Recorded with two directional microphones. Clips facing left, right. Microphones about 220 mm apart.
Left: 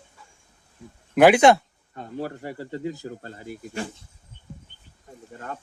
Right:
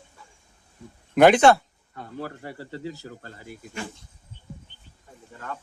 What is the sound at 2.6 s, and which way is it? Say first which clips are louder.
Speech: left 4 dB; 40° left (ahead or behind).